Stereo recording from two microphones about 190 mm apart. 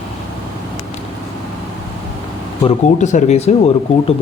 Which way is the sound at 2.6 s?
40° left (ahead or behind).